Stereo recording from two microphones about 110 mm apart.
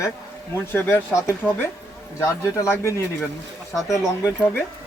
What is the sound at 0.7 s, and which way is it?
Speech, 20° left (ahead or behind).